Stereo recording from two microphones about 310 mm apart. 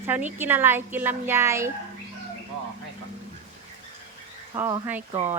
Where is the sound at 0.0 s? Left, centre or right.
Centre.